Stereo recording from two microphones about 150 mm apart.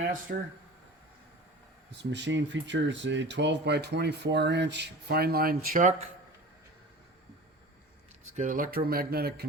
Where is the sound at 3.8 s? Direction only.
90° right; by 5.9 s 65° right (ahead or behind).